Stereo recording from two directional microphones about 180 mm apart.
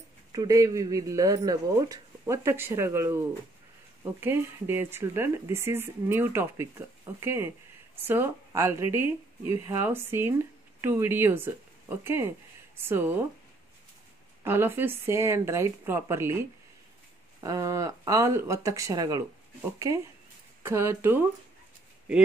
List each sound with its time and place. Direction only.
0.3 s speech: 20° right (ahead or behind)
14.4 s speech: 10° right (ahead or behind)
17.4 s speech: 20° right (ahead or behind)